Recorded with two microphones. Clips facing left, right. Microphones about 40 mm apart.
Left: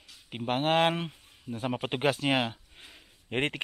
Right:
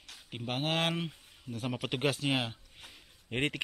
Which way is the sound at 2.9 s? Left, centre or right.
Left.